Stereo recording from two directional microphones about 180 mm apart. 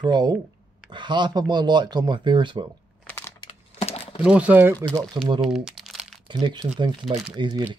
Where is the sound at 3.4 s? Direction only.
30° left (ahead or behind).